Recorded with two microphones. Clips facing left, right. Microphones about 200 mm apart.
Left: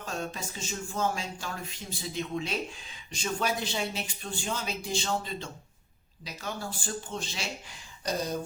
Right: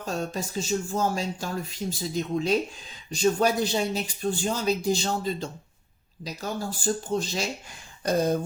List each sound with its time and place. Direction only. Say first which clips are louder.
0.0 s speech: right 5 dB; 40° right (ahead or behind)
8.0 s speech: right 8 dB; 55° right (ahead or behind)